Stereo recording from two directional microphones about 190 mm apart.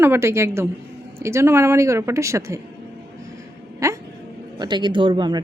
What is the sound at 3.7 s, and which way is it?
Speech, 15° right (ahead or behind).